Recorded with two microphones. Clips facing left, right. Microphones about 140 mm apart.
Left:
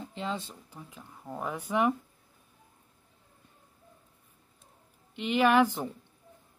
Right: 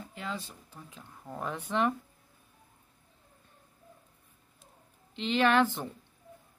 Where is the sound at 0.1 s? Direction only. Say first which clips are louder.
Left 4 dB; 25° left (ahead or behind).